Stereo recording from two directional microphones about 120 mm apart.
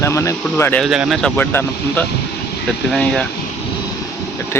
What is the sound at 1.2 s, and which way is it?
Speech, 15° left (ahead or behind).